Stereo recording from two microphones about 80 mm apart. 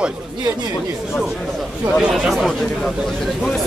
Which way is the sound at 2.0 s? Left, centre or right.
Centre.